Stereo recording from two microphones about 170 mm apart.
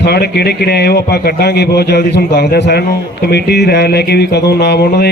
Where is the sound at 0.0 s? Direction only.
70° left (ahead or behind).